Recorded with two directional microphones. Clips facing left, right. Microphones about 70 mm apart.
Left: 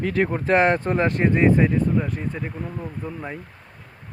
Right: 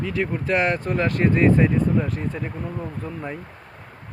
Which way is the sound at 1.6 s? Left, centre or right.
Centre.